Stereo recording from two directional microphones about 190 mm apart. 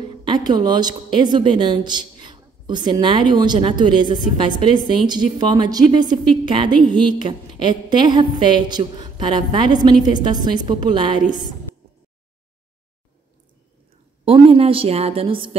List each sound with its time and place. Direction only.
0.1 s speech: 25° right (ahead or behind)
14.2 s a woman's voice: 30° right (ahead or behind)